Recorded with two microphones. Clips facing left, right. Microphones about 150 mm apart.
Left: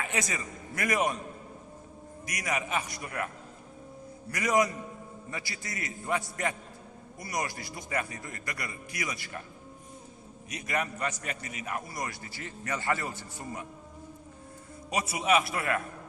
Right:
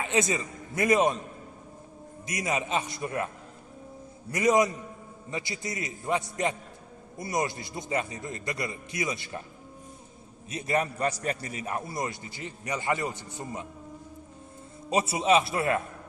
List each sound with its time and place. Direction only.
0.0 s a man's voice: 25° right (ahead or behind)
2.2 s a man's voice: 25° right (ahead or behind)
4.3 s a man's voice: 25° right (ahead or behind)
10.5 s a man's voice: 30° right (ahead or behind)
14.8 s a man's voice: 25° right (ahead or behind)